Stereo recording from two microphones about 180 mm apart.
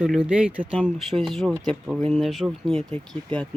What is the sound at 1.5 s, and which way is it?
Speech, 20° right (ahead or behind).